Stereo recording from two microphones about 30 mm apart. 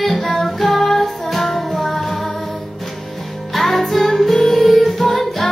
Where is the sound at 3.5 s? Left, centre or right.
Centre.